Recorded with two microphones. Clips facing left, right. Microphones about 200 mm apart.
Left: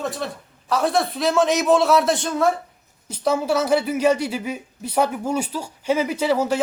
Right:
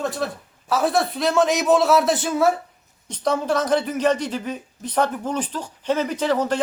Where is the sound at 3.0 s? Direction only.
5° left (ahead or behind).